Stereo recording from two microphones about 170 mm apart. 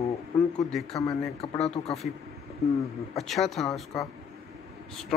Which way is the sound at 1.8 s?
40° left (ahead or behind).